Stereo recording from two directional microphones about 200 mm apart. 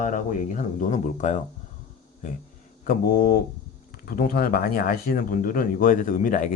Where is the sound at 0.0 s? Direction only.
40° left (ahead or behind).